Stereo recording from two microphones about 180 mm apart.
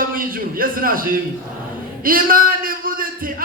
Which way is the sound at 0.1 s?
50° right (ahead or behind).